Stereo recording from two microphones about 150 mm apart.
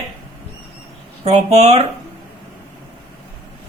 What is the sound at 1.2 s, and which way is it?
Speech, 45° right (ahead or behind).